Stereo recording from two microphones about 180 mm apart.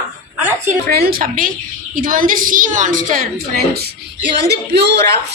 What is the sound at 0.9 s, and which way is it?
A woman's voice, 55° right (ahead or behind).